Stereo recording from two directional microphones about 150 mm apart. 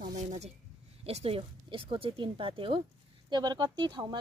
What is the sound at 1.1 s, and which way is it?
Speech, 40° right (ahead or behind).